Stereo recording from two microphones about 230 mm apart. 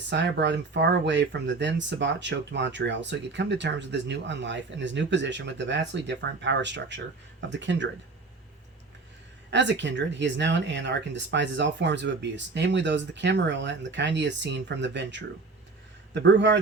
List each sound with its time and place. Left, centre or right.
0.1 s speech: right
9.5 s speech: right